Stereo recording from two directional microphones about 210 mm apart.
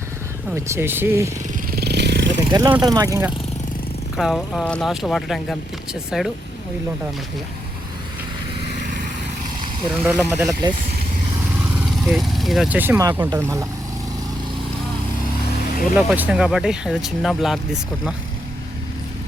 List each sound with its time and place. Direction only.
0.5 s speech: 10° right (ahead or behind)
1.7 s vehicle: 50° right (ahead or behind)
2.5 s speech: 15° right (ahead or behind)
4.2 s speech: centre (ahead or behind)
9.9 s speech: 5° right (ahead or behind)
11.7 s speech: 5° right (ahead or behind)
16.0 s speech: 5° right (ahead or behind)